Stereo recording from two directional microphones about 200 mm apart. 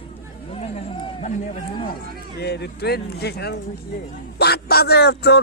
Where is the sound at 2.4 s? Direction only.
55° left (ahead or behind).